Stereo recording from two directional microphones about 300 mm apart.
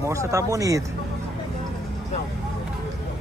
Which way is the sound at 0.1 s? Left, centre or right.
Centre.